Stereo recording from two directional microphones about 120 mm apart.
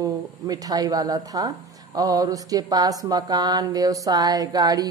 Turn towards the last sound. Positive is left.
turn(degrees=-35)  # may be behind; listen again after turning